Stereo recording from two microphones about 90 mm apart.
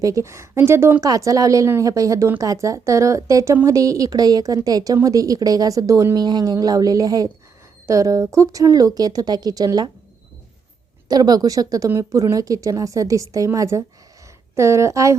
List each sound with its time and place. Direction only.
0.0 s speech: 35° right (ahead or behind)
1.0 s speech: 40° right (ahead or behind)
11.1 s speech: 45° right (ahead or behind)